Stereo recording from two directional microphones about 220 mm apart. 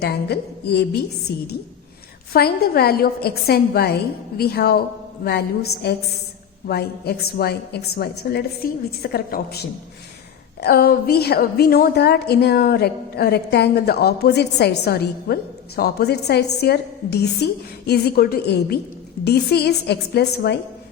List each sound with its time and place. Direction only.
0.0 s a woman's voice: 45° left (ahead or behind)